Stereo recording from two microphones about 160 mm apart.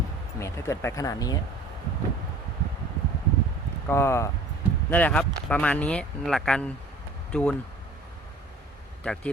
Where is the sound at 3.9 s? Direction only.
15° left (ahead or behind).